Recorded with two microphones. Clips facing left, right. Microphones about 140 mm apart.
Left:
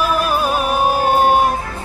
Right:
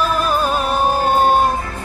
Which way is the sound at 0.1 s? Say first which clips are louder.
Even; 10° left (ahead or behind).